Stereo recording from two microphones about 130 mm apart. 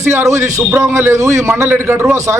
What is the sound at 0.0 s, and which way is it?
A man's voice, 20° right (ahead or behind).